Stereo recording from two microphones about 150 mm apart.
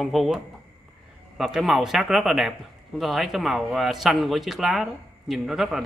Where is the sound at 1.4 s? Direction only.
Centre (ahead or behind).